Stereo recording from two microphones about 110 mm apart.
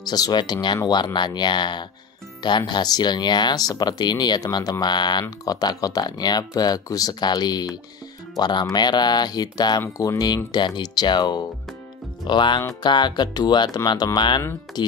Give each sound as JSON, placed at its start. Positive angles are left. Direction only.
{"t": 0.0, "sound": "speech", "side_deg": 40}